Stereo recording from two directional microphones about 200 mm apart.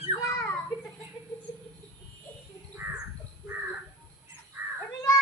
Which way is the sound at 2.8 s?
10° right (ahead or behind).